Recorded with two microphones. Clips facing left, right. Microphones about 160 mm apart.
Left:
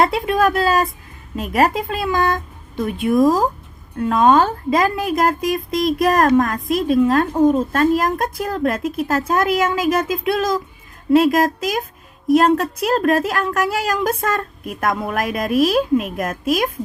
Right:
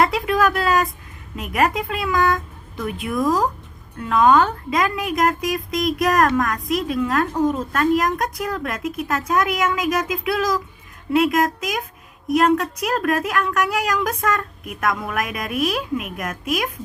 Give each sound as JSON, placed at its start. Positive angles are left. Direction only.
{"t": 0.0, "sound": "a woman's voice", "side_deg": 25}